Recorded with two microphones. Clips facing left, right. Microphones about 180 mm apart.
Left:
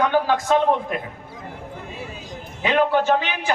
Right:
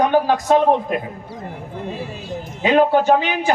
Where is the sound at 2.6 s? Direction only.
40° right (ahead or behind).